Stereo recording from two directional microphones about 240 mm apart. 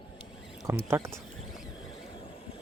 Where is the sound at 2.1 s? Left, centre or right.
Left.